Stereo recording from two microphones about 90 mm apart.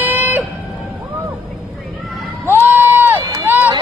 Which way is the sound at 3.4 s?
25° right (ahead or behind).